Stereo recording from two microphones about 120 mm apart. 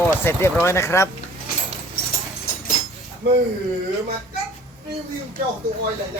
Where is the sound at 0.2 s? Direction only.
20° left (ahead or behind).